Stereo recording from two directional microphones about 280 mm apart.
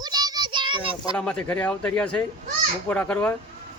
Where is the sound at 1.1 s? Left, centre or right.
Centre.